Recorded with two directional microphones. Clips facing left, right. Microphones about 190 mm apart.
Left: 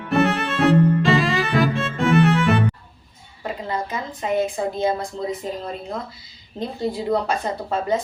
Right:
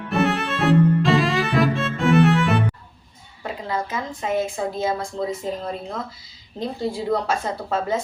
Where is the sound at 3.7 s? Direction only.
Centre (ahead or behind).